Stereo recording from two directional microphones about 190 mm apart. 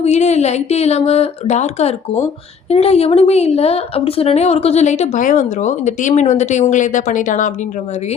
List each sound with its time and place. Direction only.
0.0 s a woman's voice: 35° left (ahead or behind)